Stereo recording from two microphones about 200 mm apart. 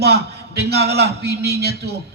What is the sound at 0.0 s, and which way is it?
A man's voice, 55° right (ahead or behind).